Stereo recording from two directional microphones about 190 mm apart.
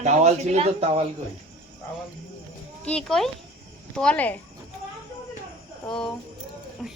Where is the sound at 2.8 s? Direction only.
5° left (ahead or behind).